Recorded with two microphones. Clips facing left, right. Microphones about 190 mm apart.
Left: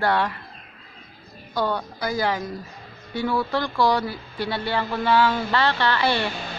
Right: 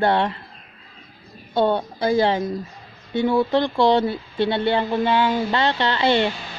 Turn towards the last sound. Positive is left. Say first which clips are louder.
# right 3 dB
turn(degrees=-20)  # may be behind; listen again after turning